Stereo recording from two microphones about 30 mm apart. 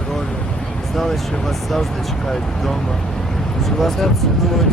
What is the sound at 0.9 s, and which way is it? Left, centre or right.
Speech, centre.